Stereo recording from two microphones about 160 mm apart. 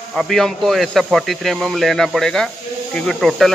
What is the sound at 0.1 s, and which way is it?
Speech, centre (ahead or behind).